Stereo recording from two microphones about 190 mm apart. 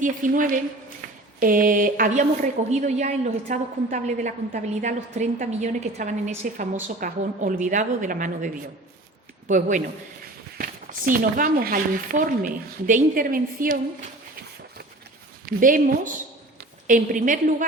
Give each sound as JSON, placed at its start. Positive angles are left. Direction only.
{"t": 0.0, "sound": "a woman's voice", "side_deg": -45}
{"t": 9.5, "sound": "speech", "side_deg": -40}
{"t": 15.4, "sound": "speech", "side_deg": -45}